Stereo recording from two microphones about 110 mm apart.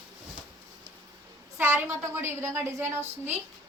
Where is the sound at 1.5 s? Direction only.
20° right (ahead or behind).